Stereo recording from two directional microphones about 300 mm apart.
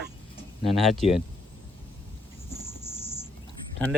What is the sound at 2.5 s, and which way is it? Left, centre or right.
Cricket, right.